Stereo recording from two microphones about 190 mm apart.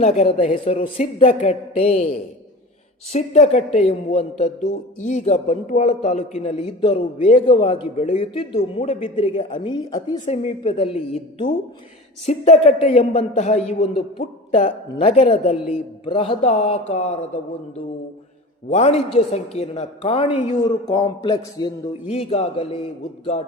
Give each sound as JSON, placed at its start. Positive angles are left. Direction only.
{"t": 0.0, "sound": "speech", "side_deg": 35}
{"t": 3.1, "sound": "speech", "side_deg": 35}
{"t": 18.7, "sound": "a woman's voice", "side_deg": 35}